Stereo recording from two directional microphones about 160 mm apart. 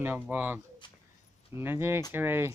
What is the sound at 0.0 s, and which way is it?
Speech, 10° right (ahead or behind).